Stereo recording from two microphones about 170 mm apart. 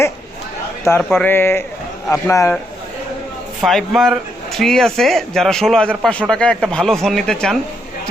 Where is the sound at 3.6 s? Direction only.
Centre (ahead or behind).